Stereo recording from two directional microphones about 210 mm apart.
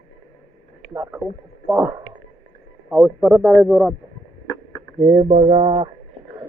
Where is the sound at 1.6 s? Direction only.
Centre (ahead or behind).